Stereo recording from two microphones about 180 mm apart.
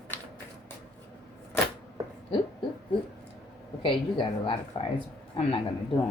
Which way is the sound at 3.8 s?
30° left (ahead or behind).